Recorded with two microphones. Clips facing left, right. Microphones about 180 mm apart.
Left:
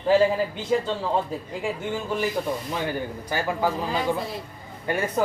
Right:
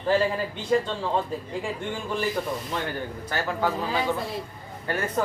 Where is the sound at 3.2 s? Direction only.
10° left (ahead or behind).